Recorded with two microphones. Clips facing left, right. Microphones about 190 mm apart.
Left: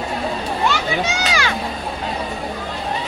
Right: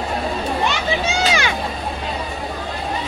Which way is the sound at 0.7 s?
20° right (ahead or behind).